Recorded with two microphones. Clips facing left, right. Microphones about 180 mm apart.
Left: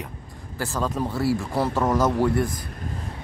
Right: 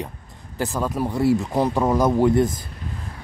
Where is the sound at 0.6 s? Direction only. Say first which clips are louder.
Right 2 dB; 15° right (ahead or behind).